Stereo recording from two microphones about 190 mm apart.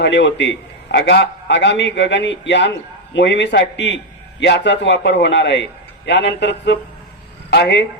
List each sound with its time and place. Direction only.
0.0 s a man's voice: 70° left (ahead or behind)